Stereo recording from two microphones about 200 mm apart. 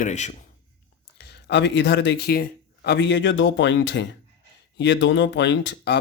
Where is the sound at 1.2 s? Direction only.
60° left (ahead or behind).